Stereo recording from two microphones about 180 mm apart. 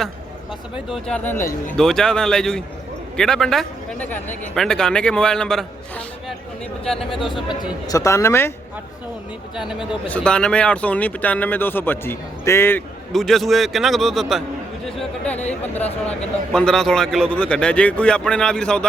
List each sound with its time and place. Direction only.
0.9 s speech: centre (ahead or behind)
6.8 s speech: centre (ahead or behind)
7.6 s speech: 20° left (ahead or behind)
10.1 s speech: 5° left (ahead or behind)
13.1 s speech: centre (ahead or behind)